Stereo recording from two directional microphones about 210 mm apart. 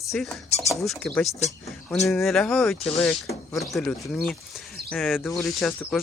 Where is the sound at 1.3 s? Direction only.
30° left (ahead or behind).